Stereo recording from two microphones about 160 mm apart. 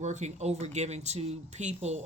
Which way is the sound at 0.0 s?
45° right (ahead or behind).